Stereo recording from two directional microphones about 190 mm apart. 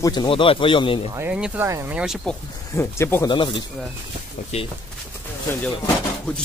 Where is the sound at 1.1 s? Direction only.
5° right (ahead or behind).